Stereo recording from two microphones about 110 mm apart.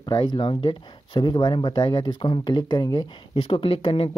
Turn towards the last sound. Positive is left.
turn(degrees=55)  # may be behind; listen again after turning